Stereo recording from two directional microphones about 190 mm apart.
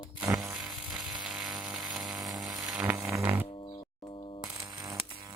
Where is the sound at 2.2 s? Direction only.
20° right (ahead or behind).